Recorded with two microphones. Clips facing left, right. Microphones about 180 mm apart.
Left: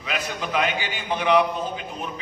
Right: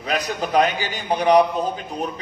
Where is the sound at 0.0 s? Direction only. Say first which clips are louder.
Right 5 dB; 40° right (ahead or behind).